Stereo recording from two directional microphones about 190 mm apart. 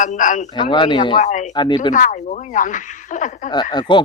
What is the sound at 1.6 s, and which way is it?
Speech, 25° left (ahead or behind).